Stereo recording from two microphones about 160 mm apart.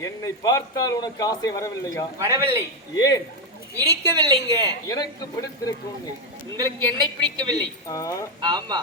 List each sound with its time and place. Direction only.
0.0 s a man's voice: 20° left (ahead or behind)
2.1 s a woman's voice: 20° right (ahead or behind)
2.9 s a man's voice: 25° left (ahead or behind)
3.8 s a woman's voice: 25° right (ahead or behind)
4.9 s a man's voice: 25° left (ahead or behind)
6.6 s a woman's voice: 25° right (ahead or behind)
7.9 s a man's voice: 20° left (ahead or behind)
8.4 s a woman's voice: 25° right (ahead or behind)